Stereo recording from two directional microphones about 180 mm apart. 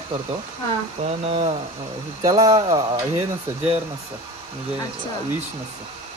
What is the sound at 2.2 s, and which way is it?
Speech, 20° right (ahead or behind).